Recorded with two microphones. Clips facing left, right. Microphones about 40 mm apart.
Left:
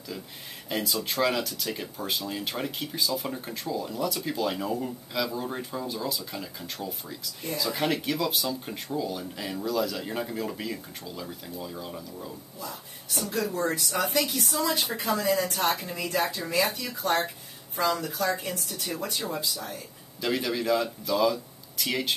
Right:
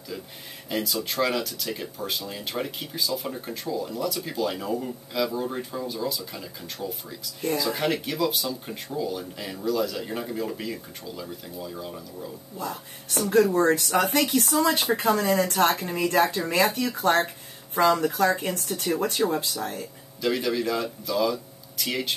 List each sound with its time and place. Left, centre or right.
0.7 s speech: centre
12.5 s speech: right
20.2 s speech: centre